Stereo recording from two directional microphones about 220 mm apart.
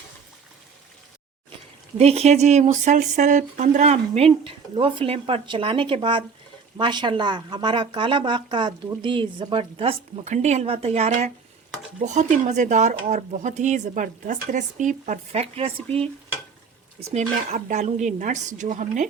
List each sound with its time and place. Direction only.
2.0 s a woman's voice: 30° right (ahead or behind)
17.2 s speech: 30° right (ahead or behind)